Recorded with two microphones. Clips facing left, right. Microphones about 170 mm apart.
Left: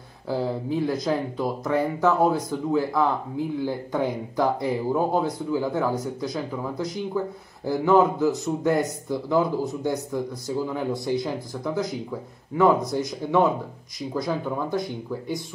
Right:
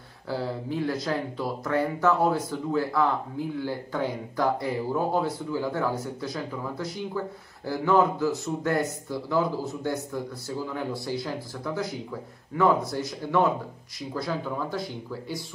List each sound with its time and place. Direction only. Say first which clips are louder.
0.3 s speech: left 4 dB; 15° left (ahead or behind)